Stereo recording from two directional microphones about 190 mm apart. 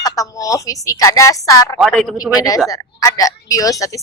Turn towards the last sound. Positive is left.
turn(degrees=15)  # may be behind; listen again after turning